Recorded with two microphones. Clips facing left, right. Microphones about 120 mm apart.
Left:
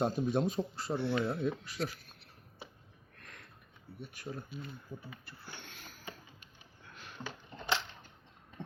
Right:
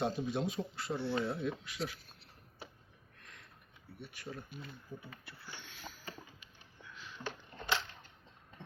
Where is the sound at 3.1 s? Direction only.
55° left (ahead or behind).